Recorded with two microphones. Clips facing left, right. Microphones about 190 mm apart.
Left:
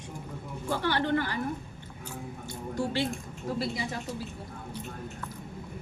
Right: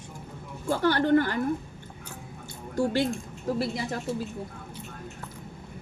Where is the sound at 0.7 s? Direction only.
45° right (ahead or behind).